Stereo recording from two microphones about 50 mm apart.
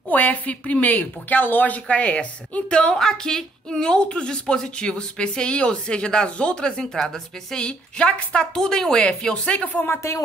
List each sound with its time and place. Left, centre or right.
0.1 s a woman's voice: left
8.5 s a woman's voice: centre; by 9.9 s left